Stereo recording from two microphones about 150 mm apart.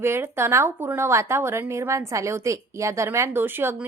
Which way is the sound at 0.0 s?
15° right (ahead or behind).